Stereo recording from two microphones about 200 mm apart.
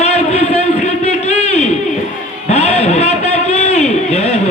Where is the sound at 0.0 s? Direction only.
35° left (ahead or behind).